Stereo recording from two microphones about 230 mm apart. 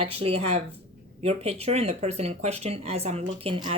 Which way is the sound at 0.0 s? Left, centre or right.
Right.